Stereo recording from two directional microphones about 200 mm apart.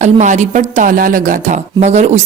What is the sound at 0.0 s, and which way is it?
Speech, 35° right (ahead or behind).